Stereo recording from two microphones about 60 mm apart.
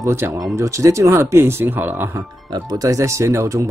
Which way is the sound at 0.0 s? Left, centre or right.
Right.